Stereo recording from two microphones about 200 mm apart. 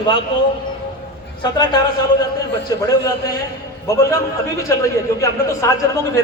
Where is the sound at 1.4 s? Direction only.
20° left (ahead or behind).